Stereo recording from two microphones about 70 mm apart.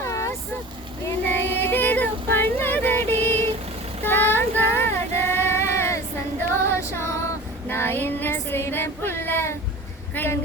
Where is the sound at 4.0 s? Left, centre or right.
Left.